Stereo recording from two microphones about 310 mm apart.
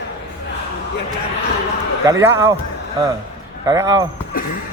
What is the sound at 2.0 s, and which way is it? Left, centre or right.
Speech, centre.